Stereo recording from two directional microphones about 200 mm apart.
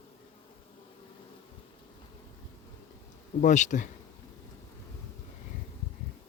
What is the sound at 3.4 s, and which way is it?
Speech, 35° left (ahead or behind).